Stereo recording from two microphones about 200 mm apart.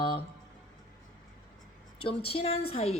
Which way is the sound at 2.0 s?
30° left (ahead or behind).